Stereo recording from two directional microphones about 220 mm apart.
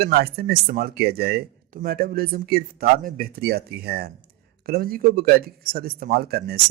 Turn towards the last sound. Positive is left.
turn(degrees=-45)  # may be behind; listen again after turning